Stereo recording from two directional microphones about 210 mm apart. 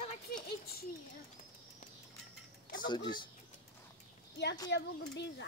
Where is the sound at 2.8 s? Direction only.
20° left (ahead or behind).